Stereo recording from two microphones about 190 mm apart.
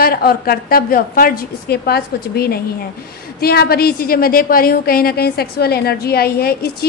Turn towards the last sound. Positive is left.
turn(degrees=55)  # may be behind; listen again after turning